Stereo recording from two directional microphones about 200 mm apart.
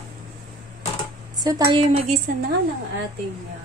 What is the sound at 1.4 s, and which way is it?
Speech, 20° right (ahead or behind).